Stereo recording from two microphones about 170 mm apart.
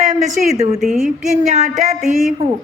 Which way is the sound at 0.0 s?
45° right (ahead or behind).